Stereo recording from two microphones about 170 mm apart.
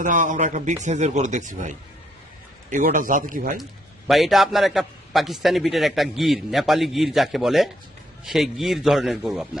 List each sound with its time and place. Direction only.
0.0 s speech: 50° right (ahead or behind)
3.6 s a man's voice: centre (ahead or behind)